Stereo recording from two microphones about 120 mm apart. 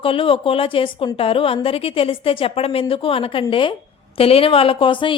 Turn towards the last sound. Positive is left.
turn(degrees=45)  # may be behind; listen again after turning